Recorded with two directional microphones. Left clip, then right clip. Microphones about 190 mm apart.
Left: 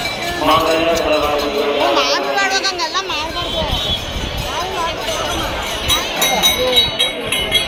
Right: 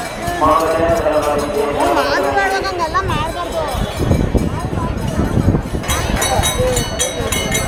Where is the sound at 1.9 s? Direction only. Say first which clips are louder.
Right 1 dB; 30° right (ahead or behind).